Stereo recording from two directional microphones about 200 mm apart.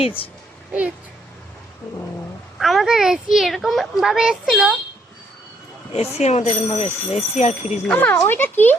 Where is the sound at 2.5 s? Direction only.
Centre (ahead or behind).